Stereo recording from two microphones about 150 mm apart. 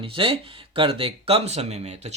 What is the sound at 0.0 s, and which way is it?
Speech, 35° right (ahead or behind).